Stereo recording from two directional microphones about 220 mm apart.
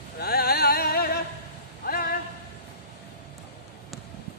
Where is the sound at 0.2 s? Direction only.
45° left (ahead or behind).